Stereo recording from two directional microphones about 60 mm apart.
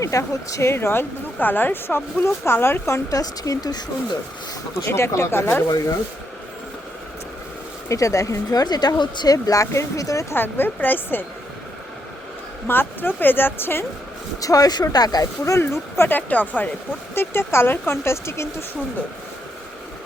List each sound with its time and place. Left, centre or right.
0.0 s speech: left
3.1 s speech: left
4.9 s speech: left
7.9 s speech: left
10.3 s speech: left
12.6 s speech: left
14.4 s speech: left
15.5 s speech: left
16.1 s speech: left
17.2 s speech: left